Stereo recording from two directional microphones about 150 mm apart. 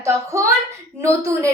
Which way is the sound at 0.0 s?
20° right (ahead or behind).